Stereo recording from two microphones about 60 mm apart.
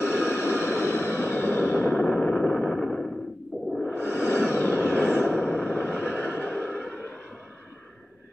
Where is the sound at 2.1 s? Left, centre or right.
Centre.